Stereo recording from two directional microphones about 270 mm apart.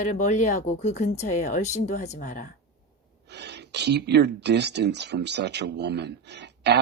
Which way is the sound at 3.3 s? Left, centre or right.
Right.